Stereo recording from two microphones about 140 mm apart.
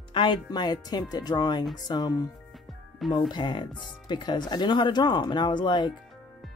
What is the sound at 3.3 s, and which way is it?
Speech, 30° left (ahead or behind).